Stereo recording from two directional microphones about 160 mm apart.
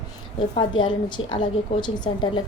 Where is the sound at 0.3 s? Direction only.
30° left (ahead or behind).